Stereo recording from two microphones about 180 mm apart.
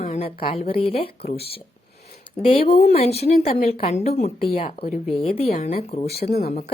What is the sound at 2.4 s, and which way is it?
Speech, 30° left (ahead or behind).